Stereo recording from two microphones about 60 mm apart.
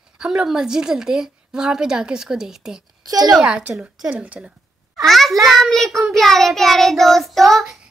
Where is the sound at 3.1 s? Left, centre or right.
Right.